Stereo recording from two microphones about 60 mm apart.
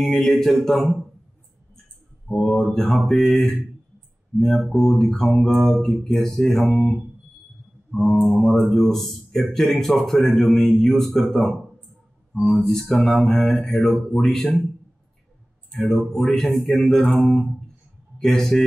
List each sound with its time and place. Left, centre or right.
0.2 s speech: centre
2.2 s speech: centre
3.3 s speech: left
4.4 s speech: centre
7.9 s speech: centre
16.1 s speech: centre